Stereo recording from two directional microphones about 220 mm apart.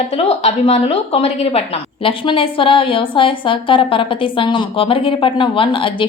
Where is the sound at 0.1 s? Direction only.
25° left (ahead or behind).